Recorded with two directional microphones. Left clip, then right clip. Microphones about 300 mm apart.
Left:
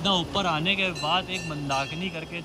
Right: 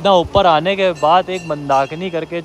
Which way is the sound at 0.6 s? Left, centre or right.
Centre.